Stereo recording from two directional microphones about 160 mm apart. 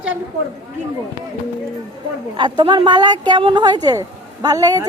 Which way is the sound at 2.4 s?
30° right (ahead or behind).